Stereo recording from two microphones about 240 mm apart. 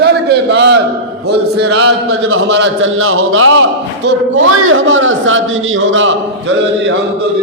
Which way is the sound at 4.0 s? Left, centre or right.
Right.